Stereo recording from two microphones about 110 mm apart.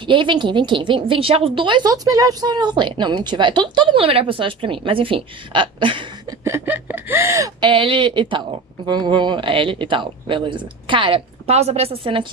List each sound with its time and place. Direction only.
0.0 s a woman's voice: 50° right (ahead or behind)
6.4 s a sound: 20° right (ahead or behind)
7.6 s a woman's voice: 50° right (ahead or behind)
11.5 s a woman's voice: 75° right (ahead or behind); by 12.3 s 55° right (ahead or behind)